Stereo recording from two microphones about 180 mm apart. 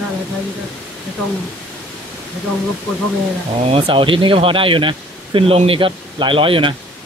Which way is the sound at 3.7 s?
30° right (ahead or behind).